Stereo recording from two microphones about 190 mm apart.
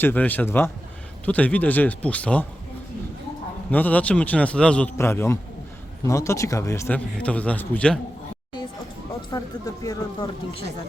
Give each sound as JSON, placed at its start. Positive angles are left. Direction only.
{"t": 0.0, "sound": "a man's voice", "side_deg": 10}
{"t": 3.7, "sound": "a man's voice", "side_deg": 10}
{"t": 9.3, "sound": "speech", "side_deg": 20}